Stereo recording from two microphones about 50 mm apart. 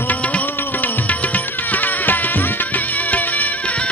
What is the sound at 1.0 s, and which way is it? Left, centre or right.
Music, left.